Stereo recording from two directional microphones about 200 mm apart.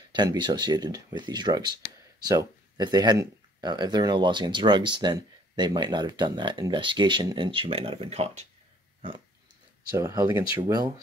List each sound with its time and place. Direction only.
0.1 s speech: 20° right (ahead or behind)
9.9 s speech: 15° right (ahead or behind)